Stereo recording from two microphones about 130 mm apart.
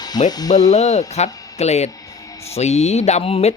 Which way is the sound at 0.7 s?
60° left (ahead or behind).